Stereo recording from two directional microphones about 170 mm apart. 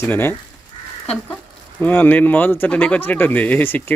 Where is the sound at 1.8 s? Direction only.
10° left (ahead or behind).